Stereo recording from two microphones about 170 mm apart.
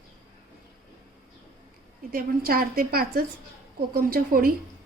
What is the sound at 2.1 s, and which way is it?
A woman's voice, 60° right (ahead or behind).